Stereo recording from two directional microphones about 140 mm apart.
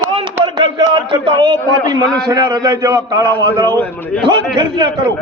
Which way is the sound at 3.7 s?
15° left (ahead or behind).